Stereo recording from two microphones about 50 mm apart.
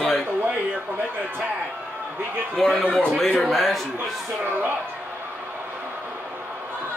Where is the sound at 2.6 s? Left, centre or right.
Centre.